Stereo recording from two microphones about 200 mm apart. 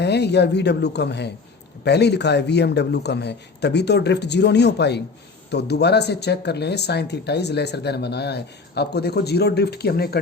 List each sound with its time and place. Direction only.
0.0 s speech: 55° left (ahead or behind)